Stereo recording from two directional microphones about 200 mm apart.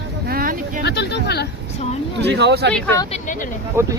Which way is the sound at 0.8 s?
55° left (ahead or behind).